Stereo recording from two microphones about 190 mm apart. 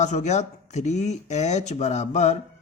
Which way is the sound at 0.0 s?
40° left (ahead or behind).